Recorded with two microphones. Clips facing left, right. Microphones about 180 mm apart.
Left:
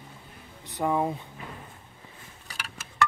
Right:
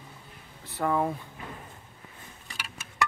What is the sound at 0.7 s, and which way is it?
Speech, 15° left (ahead or behind).